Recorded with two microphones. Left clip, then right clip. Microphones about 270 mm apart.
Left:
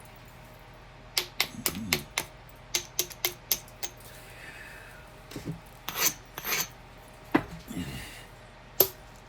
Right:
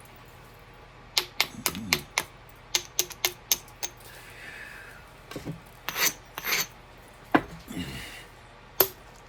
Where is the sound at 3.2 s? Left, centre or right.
Centre.